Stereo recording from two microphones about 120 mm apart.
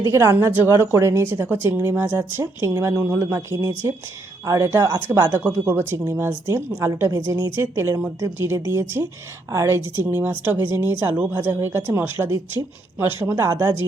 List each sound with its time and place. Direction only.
0.0 s speech: 25° right (ahead or behind)